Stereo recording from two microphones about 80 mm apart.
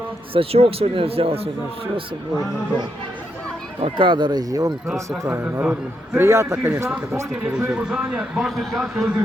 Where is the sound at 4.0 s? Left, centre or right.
Right.